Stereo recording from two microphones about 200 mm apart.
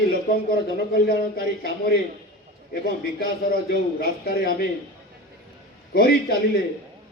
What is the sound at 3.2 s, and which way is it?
A man's voice, 50° left (ahead or behind).